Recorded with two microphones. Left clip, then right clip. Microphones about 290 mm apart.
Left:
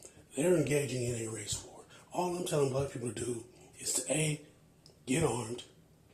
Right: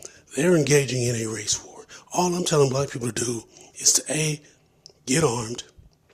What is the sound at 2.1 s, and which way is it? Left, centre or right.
Speech, right.